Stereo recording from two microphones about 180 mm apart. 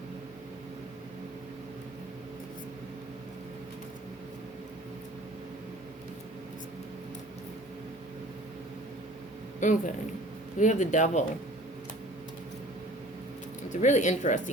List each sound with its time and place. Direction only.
9.6 s speech: 45° left (ahead or behind)
13.8 s speech: 40° left (ahead or behind)